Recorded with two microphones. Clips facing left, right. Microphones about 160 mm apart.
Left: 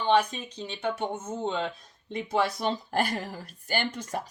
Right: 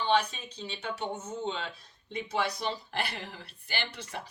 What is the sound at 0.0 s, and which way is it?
Speech, 50° left (ahead or behind).